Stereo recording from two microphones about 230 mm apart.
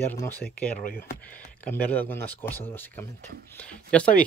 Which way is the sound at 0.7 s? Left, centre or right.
Left.